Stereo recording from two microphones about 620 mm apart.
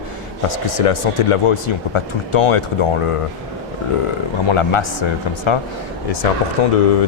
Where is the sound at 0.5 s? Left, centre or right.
Left.